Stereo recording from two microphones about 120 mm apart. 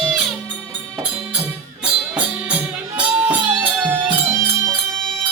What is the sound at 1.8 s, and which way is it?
Music, 10° right (ahead or behind).